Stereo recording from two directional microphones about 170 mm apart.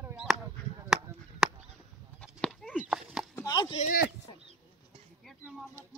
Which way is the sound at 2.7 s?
5° right (ahead or behind).